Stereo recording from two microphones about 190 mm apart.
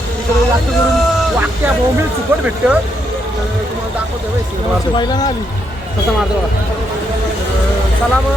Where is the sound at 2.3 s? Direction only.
10° right (ahead or behind).